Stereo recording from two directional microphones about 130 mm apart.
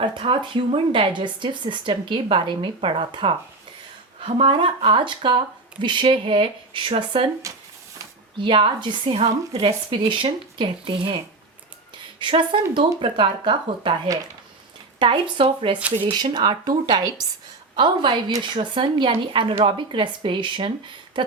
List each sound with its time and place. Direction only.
0.2 s a woman's voice: 50° right (ahead or behind)
7.5 s a sound: 25° right (ahead or behind)
8.4 s a woman's voice: 40° right (ahead or behind)
12.2 s a woman's voice: 40° right (ahead or behind)